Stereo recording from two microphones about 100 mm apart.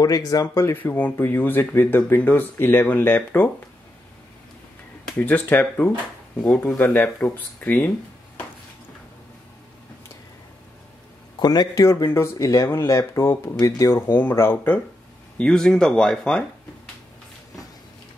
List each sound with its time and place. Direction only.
0.0 s speech: 35° left (ahead or behind); by 3.5 s 20° left (ahead or behind)
5.1 s speech: 20° left (ahead or behind)
11.3 s speech: 45° left (ahead or behind)
13.9 s speech: 20° left (ahead or behind)
15.3 s speech: 5° left (ahead or behind)